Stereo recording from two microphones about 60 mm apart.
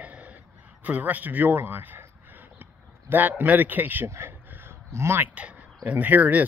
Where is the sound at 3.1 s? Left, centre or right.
Right.